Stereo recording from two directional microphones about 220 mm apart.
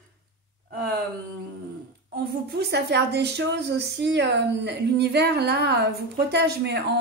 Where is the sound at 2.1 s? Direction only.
45° right (ahead or behind).